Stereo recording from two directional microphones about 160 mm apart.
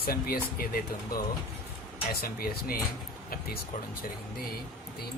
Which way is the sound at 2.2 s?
65° left (ahead or behind).